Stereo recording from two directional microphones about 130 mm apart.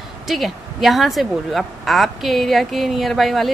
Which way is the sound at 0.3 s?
Centre (ahead or behind).